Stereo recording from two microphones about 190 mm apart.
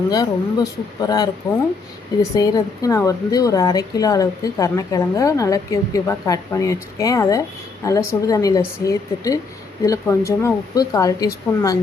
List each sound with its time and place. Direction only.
0.1 s speech: 20° left (ahead or behind)
2.3 s a woman's voice: 20° left (ahead or behind)